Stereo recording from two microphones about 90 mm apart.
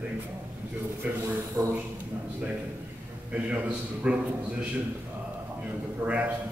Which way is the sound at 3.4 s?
15° right (ahead or behind).